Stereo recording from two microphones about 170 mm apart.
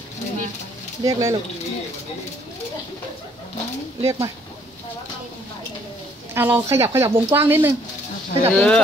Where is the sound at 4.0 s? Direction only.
15° right (ahead or behind).